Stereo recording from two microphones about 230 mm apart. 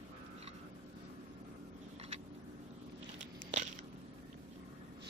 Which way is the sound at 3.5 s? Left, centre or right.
Right.